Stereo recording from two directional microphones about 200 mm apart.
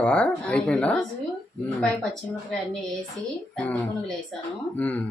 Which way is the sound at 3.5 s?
Centre (ahead or behind).